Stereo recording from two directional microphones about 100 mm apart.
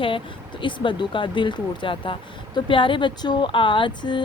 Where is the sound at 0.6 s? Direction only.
55° left (ahead or behind).